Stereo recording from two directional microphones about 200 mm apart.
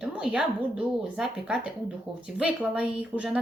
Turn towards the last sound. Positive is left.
turn(degrees=-5)  # may be behind; listen again after turning